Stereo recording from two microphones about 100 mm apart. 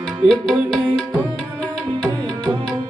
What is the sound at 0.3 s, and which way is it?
Music, 5° right (ahead or behind).